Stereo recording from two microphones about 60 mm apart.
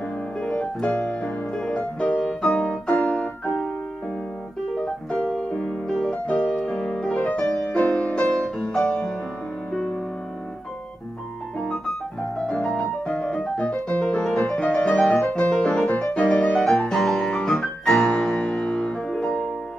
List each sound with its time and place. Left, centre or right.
0.4 s music: centre
2.9 s keyboard: centre
4.7 s piano: centre
5.4 s music: centre
11.6 s piano: centre
13.4 s piano: centre
14.0 s music: centre
16.1 s music: left
16.5 s music: centre